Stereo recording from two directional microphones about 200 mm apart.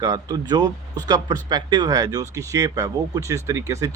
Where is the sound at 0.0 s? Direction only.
20° right (ahead or behind).